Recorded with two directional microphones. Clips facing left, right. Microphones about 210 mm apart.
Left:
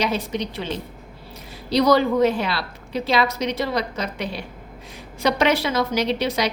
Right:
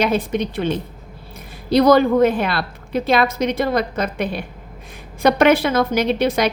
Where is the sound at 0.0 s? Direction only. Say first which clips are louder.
Right 5 dB; 55° right (ahead or behind).